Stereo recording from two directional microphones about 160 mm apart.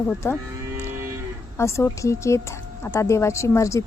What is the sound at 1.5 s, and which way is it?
Speech, 15° left (ahead or behind).